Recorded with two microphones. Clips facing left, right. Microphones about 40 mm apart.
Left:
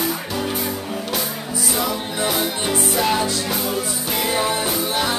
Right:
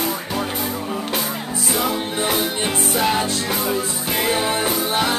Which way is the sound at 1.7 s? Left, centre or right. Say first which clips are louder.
Right 3 dB; right.